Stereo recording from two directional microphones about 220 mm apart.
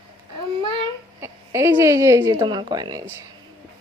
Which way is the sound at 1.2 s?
10° right (ahead or behind).